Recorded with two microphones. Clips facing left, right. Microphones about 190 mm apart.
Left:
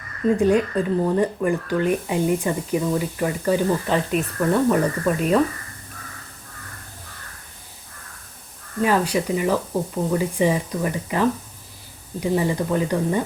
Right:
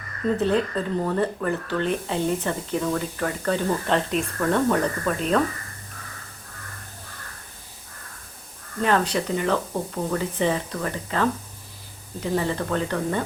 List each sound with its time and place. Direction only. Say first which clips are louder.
0.3 s speech: left 4 dB; 10° left (ahead or behind)
8.8 s speech: left 2 dB; 5° left (ahead or behind)